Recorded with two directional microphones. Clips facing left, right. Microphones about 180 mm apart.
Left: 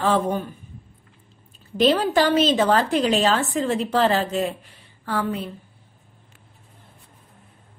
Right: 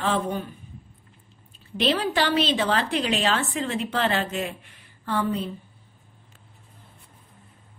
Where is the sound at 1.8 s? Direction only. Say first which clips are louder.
Left 5 dB; 40° left (ahead or behind).